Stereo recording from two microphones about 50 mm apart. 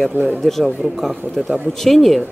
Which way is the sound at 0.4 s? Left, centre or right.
Centre.